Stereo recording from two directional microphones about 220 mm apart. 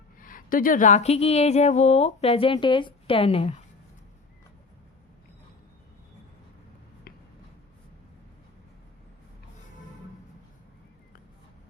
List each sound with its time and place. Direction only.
0.2 s speech: 40° left (ahead or behind)